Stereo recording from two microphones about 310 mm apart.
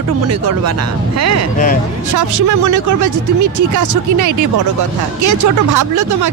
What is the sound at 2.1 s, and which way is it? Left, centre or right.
Speech, right.